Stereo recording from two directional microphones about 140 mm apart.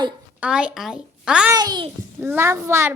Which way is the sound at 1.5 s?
30° right (ahead or behind).